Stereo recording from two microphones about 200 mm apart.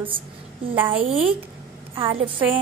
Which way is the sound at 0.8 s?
30° right (ahead or behind).